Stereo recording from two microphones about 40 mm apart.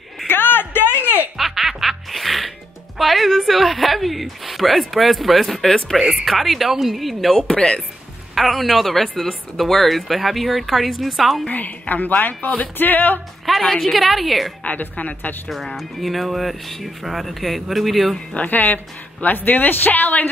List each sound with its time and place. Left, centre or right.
0.3 s a sound: left
1.3 s music: centre
3.0 s a sound: centre
5.9 s speech: centre
7.4 s speech: left
8.4 s speech: centre
11.4 s a woman's voice: left
13.5 s speech: centre
14.6 s a woman's voice: left
15.5 s speech: centre
18.3 s a woman's voice: left